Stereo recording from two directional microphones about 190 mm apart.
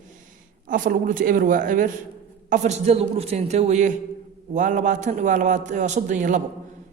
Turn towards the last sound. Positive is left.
turn(degrees=-40)  # may be behind; listen again after turning